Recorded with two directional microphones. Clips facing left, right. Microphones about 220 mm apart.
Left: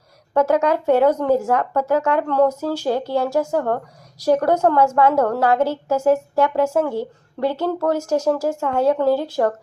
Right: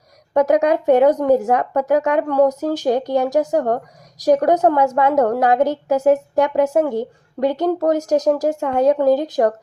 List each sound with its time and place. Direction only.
0.3 s a woman's voice: 15° right (ahead or behind)